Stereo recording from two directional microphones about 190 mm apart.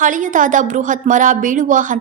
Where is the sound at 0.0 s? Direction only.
40° right (ahead or behind).